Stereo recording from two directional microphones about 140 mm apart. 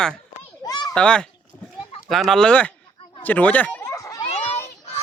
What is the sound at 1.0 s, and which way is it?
Speech, 5° left (ahead or behind).